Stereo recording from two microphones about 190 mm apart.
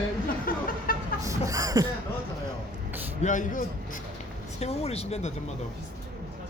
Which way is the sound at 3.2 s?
40° left (ahead or behind).